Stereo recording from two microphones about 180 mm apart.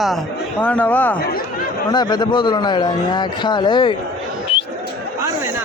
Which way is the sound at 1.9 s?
25° left (ahead or behind).